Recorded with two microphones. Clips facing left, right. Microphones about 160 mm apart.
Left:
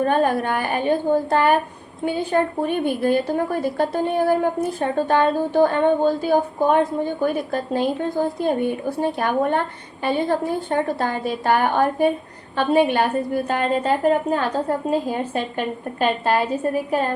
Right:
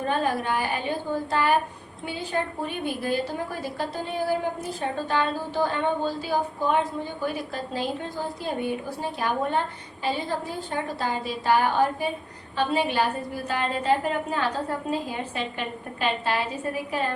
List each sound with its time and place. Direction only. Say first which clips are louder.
0.0 s a woman's voice: left 7 dB; 55° left (ahead or behind)